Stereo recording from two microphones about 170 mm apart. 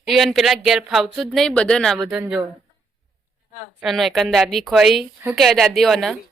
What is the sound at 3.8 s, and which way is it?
A woman's voice, centre (ahead or behind).